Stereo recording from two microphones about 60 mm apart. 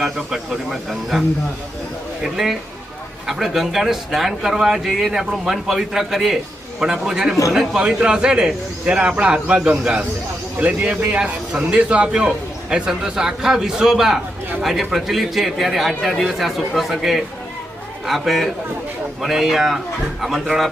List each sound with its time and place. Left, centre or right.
0.0 s speech: centre
2.3 s speech: centre